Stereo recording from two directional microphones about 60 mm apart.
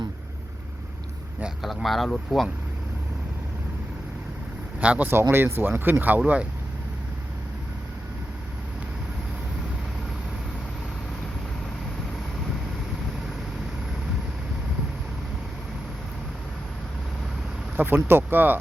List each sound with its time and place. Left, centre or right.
1.6 s speech: centre
4.8 s speech: right
5.0 s speech: right
17.7 s speech: right